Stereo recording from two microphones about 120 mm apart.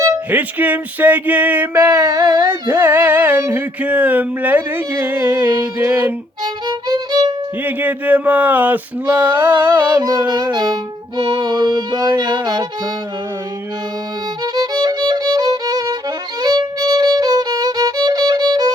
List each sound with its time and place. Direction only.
0.3 s music: 15° right (ahead or behind)
1.8 s music: 30° right (ahead or behind)
6.4 s violin: 35° right (ahead or behind)
7.6 s music: 15° right (ahead or behind)
10.0 s music: 35° right (ahead or behind)
14.4 s music: 35° right (ahead or behind)
16.4 s violin: 35° right (ahead or behind)